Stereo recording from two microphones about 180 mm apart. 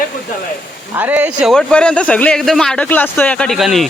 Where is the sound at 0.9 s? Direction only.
10° right (ahead or behind).